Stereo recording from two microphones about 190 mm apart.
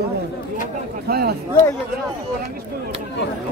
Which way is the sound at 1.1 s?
55° right (ahead or behind).